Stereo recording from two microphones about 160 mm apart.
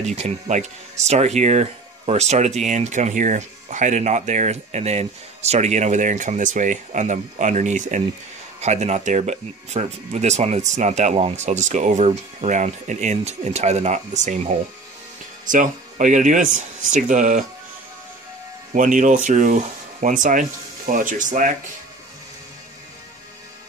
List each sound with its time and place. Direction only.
0.0 s speech: 45° right (ahead or behind)
18.7 s speech: 55° right (ahead or behind)